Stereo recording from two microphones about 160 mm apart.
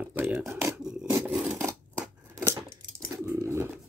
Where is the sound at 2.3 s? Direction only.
20° right (ahead or behind).